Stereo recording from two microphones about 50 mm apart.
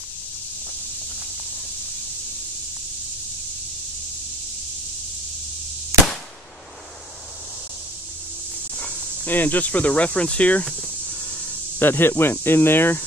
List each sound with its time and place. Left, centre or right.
5.9 s firecracker: right
8.7 s speech: left
11.8 s speech: left